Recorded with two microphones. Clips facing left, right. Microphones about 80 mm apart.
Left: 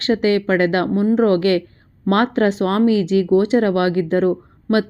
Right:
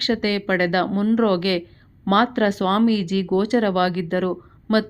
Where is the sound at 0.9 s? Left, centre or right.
Left.